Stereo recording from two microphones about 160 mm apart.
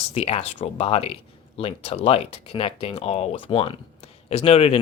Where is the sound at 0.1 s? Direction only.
40° left (ahead or behind).